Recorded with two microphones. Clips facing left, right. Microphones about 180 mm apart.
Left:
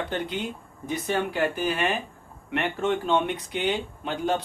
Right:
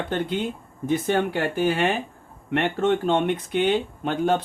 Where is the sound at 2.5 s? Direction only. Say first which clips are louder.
Right 4 dB; 55° right (ahead or behind).